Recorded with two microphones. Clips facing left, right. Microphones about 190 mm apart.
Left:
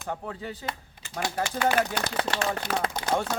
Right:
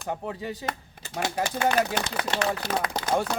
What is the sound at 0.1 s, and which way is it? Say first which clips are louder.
Speech: right 3 dB; 15° right (ahead or behind).